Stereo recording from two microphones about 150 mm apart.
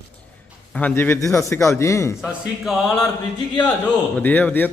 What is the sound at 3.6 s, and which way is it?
A man's voice, 10° left (ahead or behind).